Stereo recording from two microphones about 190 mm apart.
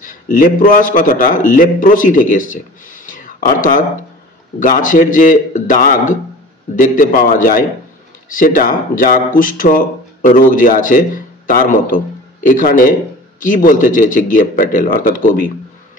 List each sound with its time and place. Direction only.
0.0 s a man's voice: 45° left (ahead or behind)